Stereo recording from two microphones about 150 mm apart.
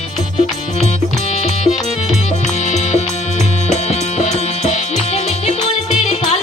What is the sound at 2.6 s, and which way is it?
Music, 50° left (ahead or behind).